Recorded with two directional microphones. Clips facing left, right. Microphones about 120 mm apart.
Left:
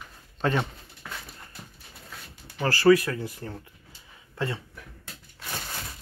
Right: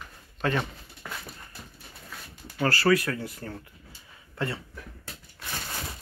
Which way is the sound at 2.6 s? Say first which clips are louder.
Left 4 dB; 20° left (ahead or behind).